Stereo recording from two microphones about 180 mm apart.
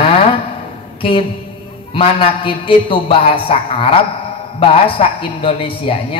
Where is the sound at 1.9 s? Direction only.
30° left (ahead or behind).